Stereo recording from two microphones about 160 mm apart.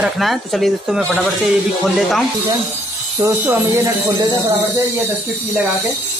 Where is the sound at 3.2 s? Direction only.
15° right (ahead or behind).